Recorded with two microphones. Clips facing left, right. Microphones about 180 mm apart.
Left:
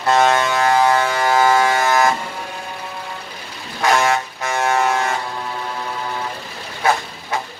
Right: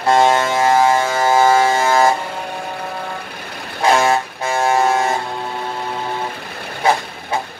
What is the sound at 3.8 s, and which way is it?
Vehicle, 30° right (ahead or behind).